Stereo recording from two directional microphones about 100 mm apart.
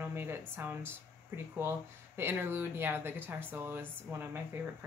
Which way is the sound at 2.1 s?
25° right (ahead or behind).